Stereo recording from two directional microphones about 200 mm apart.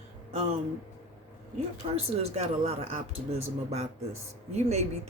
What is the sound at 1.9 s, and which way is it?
Speech, 30° right (ahead or behind).